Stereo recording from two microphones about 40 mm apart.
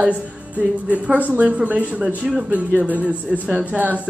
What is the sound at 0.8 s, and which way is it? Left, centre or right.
Speech, right.